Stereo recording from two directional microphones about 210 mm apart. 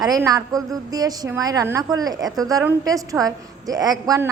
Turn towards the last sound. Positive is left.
turn(degrees=-15)  # may be behind; listen again after turning